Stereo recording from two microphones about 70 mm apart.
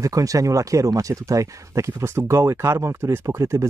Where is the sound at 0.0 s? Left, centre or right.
Right.